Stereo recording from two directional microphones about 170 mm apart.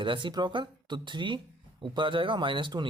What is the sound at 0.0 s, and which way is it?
Speech, 30° right (ahead or behind).